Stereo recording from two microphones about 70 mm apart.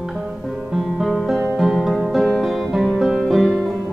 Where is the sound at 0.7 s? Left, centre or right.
Centre.